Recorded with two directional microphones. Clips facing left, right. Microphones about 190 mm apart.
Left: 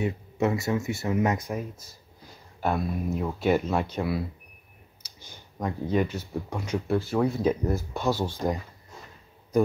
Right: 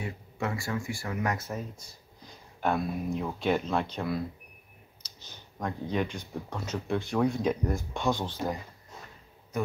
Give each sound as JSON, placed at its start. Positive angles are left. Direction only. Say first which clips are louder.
{"t": 0.0, "sound": "speech", "louder": "left 8 dB", "side_deg": 20}